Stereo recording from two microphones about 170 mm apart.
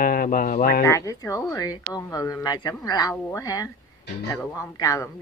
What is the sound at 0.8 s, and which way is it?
Speech, 15° left (ahead or behind).